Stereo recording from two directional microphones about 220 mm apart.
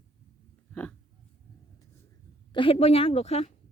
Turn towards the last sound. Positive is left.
turn(degrees=30)  # may be behind; listen again after turning